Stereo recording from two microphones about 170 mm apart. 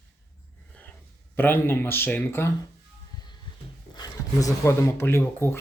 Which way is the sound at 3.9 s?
20° left (ahead or behind).